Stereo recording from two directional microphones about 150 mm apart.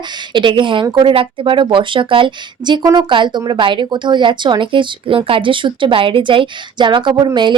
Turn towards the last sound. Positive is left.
turn(degrees=-30)  # may be behind; listen again after turning